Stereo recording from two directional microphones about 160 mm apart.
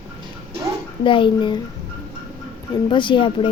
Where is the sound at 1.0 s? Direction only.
30° left (ahead or behind).